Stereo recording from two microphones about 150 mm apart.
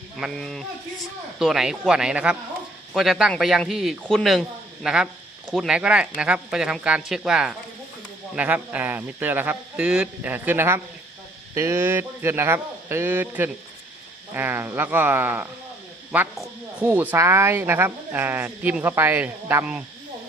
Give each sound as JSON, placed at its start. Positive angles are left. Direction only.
{"t": 0.2, "sound": "a man's voice", "side_deg": 0}